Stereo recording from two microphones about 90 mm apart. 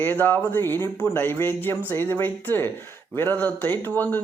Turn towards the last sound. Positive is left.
turn(degrees=20)  # may be behind; listen again after turning